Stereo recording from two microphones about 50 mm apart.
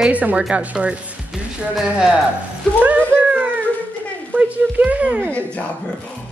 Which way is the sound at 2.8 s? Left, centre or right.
Right.